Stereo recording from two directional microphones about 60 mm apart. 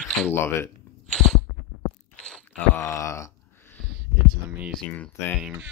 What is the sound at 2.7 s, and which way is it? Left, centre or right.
Groan, left.